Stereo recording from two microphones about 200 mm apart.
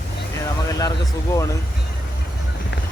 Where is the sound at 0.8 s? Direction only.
15° left (ahead or behind).